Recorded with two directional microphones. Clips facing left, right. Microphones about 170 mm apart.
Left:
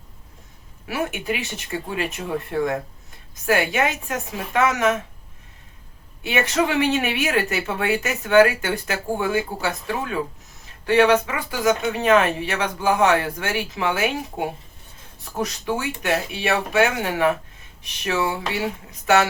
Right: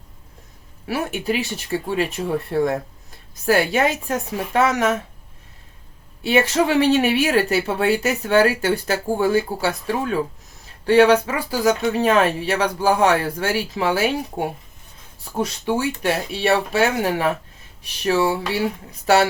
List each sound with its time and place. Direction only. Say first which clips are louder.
0.9 s speech: right 2 dB; 35° right (ahead or behind)
6.2 s speech: right 4 dB; 30° right (ahead or behind)